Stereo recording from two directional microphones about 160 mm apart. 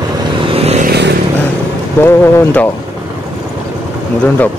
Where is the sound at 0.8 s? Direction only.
90° right.